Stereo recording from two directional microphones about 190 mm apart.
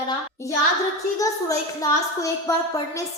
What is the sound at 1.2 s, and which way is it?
A woman's voice, 15° left (ahead or behind).